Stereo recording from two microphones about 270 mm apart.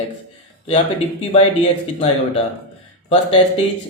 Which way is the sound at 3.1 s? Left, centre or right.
Left.